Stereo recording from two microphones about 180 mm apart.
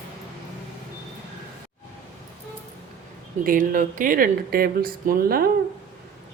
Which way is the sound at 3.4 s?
50° right (ahead or behind).